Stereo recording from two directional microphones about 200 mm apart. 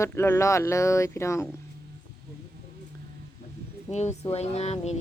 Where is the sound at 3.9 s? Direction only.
35° left (ahead or behind).